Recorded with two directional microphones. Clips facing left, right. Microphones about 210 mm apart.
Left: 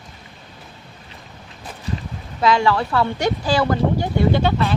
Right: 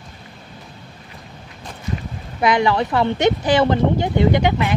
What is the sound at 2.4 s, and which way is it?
Speech, 20° right (ahead or behind).